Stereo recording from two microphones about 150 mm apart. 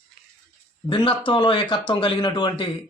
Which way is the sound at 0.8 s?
30° left (ahead or behind).